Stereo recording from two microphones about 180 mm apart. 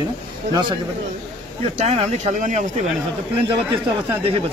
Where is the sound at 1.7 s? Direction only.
40° right (ahead or behind).